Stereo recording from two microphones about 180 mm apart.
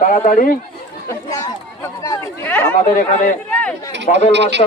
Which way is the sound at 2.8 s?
45° left (ahead or behind).